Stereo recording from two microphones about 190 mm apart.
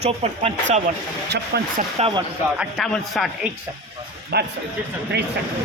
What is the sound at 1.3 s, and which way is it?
Speech, 60° right (ahead or behind).